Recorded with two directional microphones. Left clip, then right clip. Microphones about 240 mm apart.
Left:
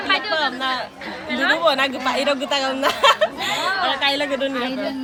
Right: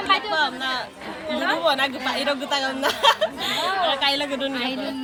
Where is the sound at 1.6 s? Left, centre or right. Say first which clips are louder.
Left 3 dB; centre.